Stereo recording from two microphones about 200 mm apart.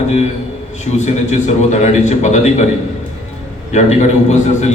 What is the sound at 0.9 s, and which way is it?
A man's voice, 35° left (ahead or behind).